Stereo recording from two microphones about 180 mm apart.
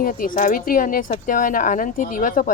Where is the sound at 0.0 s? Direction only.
50° left (ahead or behind).